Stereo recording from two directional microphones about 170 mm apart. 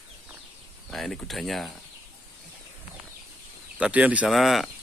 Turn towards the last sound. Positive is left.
turn(degrees=0)  # may be behind; listen again after turning